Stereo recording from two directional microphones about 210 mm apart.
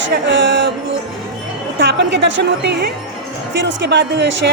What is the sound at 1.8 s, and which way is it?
Speech, 55° right (ahead or behind).